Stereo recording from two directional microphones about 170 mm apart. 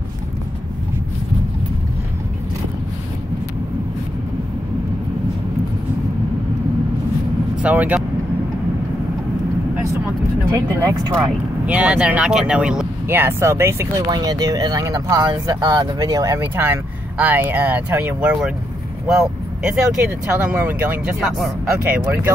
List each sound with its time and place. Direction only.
7.6 s speech: 10° right (ahead or behind)
10.5 s speech: 20° right (ahead or behind)
11.6 s speech: 5° right (ahead or behind)
19.6 s speech: 5° right (ahead or behind)